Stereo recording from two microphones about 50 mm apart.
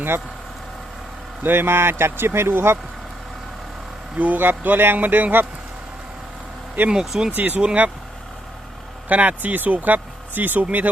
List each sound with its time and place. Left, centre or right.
1.5 s speech: right
4.2 s speech: right
6.9 s speech: centre
7.3 s speech: right
9.0 s speech: right